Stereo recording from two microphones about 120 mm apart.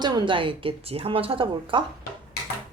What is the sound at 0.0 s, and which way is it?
Speech, 35° right (ahead or behind).